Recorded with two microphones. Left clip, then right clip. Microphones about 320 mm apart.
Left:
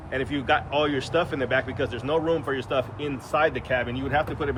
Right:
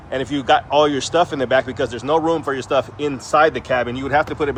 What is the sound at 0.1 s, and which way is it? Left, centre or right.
Speech, centre.